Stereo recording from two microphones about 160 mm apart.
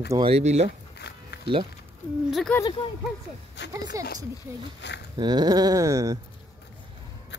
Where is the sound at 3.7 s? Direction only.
20° right (ahead or behind).